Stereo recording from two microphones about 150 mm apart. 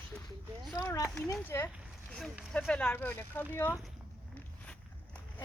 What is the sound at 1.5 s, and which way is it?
Speech, 20° left (ahead or behind).